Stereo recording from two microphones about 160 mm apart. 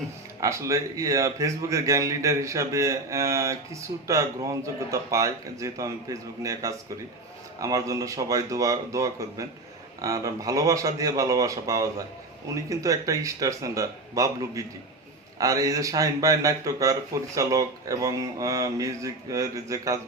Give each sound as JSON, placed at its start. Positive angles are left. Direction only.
{"t": 0.3, "sound": "speech", "side_deg": -20}